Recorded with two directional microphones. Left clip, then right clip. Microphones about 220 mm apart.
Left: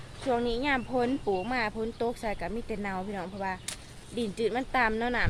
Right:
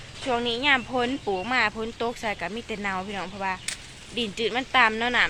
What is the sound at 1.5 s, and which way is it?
Speech, 5° left (ahead or behind).